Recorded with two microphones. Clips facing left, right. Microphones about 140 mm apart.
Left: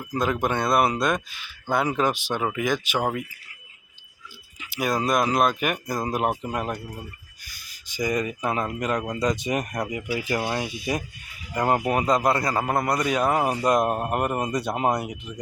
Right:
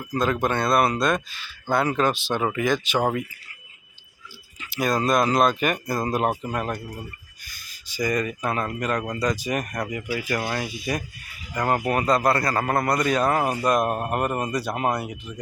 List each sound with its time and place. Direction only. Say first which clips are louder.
0.0 s a man's voice: right 1 dB; 15° left (ahead or behind)
4.6 s a man's voice: right 2 dB; 10° left (ahead or behind)